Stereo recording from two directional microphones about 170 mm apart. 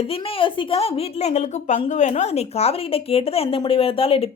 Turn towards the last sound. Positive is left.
turn(degrees=35)  # may be behind; listen again after turning